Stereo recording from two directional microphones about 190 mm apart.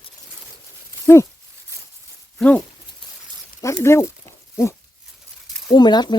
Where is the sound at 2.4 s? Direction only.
5° left (ahead or behind).